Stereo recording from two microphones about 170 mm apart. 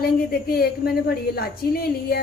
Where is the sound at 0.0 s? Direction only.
60° left (ahead or behind).